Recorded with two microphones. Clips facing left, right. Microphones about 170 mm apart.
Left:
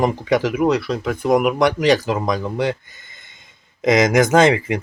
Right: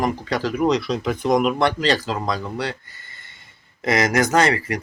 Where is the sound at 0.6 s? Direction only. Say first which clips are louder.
Left 2 dB; 5° left (ahead or behind); by 4.8 s 20° left (ahead or behind).